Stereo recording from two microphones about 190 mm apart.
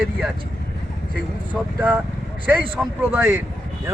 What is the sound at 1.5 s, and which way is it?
A man's voice, 5° right (ahead or behind).